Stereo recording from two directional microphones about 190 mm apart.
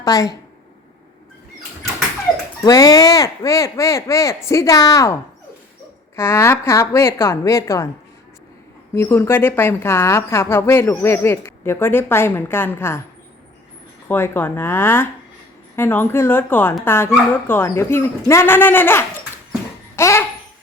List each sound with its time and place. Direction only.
0.0 s a woman's voice: 20° left (ahead or behind)
2.6 s a woman's voice: 20° left (ahead or behind)
9.0 s a woman's voice: 15° left (ahead or behind)
14.1 s a woman's voice: 10° left (ahead or behind)